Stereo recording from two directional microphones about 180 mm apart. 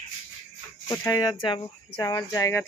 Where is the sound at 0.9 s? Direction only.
20° left (ahead or behind).